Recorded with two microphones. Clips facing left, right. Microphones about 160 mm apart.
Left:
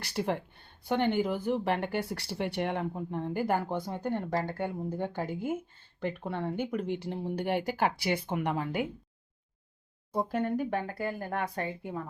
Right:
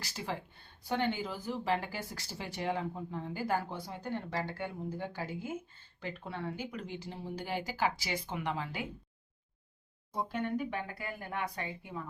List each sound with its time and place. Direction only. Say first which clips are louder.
0.0 s speech: left 8 dB; 60° left (ahead or behind)
10.2 s speech: left 5 dB; 45° left (ahead or behind)